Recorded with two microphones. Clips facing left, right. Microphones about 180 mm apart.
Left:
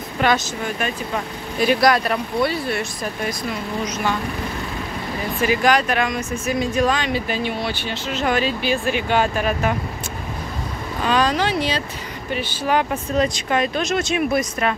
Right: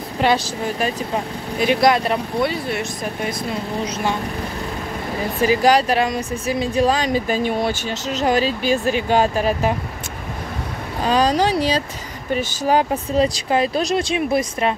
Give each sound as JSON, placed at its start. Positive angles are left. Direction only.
{"t": 0.2, "sound": "speech", "side_deg": -30}
{"t": 1.6, "sound": "speech", "side_deg": -20}
{"t": 3.8, "sound": "speech", "side_deg": -30}
{"t": 5.4, "sound": "speech", "side_deg": -35}
{"t": 11.0, "sound": "speech", "side_deg": -35}